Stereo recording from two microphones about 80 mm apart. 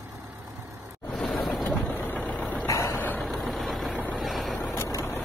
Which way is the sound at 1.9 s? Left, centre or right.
Left.